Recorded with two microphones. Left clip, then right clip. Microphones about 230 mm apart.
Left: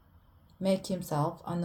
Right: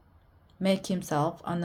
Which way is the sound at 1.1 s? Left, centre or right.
Right.